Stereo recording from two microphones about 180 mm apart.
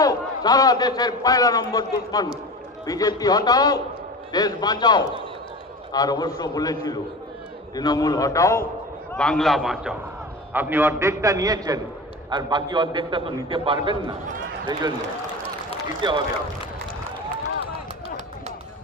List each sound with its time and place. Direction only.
0.0 s a man's voice: 20° left (ahead or behind)
9.1 s a man's voice: 5° left (ahead or behind); by 15.0 s 25° right (ahead or behind)